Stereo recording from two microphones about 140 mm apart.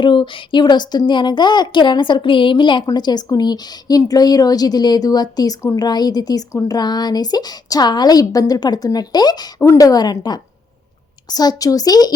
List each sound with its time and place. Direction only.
0.0 s speech: 35° left (ahead or behind)